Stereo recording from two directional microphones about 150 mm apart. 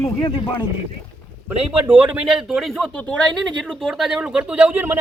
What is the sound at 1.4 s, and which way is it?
Speech, 10° right (ahead or behind).